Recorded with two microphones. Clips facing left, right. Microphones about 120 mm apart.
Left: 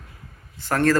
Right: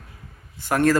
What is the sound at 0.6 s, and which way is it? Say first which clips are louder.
Speech: right 1 dB; 10° right (ahead or behind).